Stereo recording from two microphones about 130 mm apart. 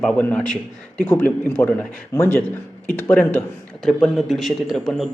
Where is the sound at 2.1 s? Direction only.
25° left (ahead or behind).